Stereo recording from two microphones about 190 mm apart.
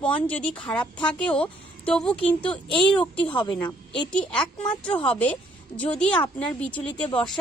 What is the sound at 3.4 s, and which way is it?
Speech, 20° left (ahead or behind).